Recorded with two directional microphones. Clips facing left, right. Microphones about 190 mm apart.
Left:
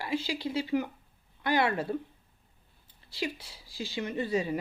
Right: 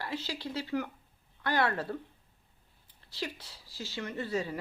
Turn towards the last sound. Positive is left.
turn(degrees=15)  # may be behind; listen again after turning